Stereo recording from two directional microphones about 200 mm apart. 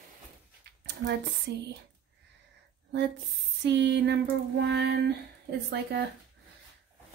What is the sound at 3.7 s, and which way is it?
Child singing, 60° right (ahead or behind).